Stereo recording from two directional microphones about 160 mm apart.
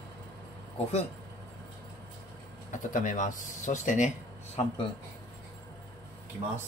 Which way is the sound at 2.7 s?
55° left (ahead or behind).